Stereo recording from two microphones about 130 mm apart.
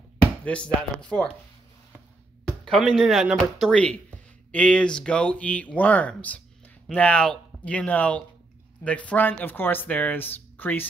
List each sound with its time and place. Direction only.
0.5 s speech: 5° left (ahead or behind)
2.6 s speech: 5° left (ahead or behind)